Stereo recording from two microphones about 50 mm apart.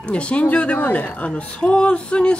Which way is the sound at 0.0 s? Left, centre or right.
Left.